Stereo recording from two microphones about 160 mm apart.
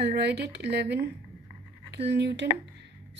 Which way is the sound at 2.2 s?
90° right.